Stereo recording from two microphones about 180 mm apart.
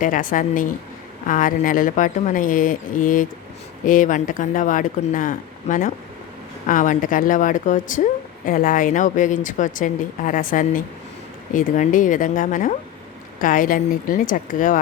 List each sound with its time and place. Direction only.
0.0 s speech: 50° left (ahead or behind)